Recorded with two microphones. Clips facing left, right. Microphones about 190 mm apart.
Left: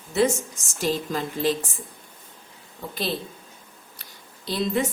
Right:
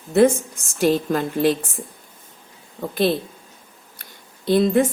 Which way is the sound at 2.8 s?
55° right (ahead or behind).